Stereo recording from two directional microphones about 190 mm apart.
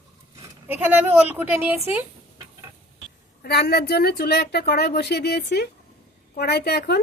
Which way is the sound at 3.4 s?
55° left (ahead or behind).